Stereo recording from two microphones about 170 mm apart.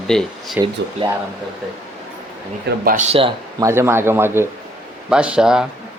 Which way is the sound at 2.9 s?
40° right (ahead or behind).